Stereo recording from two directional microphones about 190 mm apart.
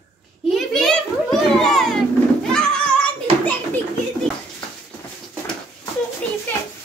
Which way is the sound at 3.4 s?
5° left (ahead or behind).